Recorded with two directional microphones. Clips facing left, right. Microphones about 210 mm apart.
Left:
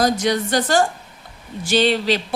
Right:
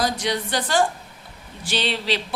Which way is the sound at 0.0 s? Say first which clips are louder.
Left 6 dB; 45° left (ahead or behind).